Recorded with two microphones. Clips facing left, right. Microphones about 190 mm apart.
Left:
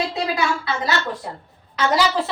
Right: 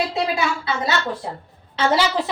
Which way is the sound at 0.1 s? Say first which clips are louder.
Even; 20° right (ahead or behind).